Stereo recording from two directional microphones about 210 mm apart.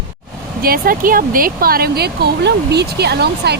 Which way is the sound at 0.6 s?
45° right (ahead or behind).